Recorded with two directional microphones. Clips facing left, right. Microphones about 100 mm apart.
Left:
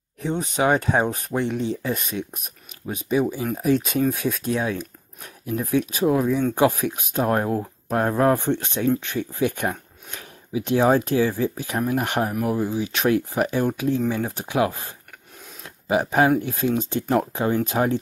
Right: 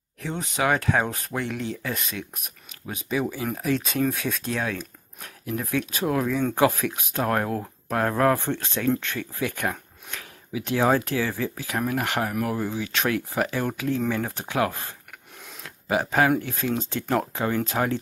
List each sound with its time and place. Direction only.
0.2 s speech: 20° left (ahead or behind)
15.9 s speech: 20° left (ahead or behind)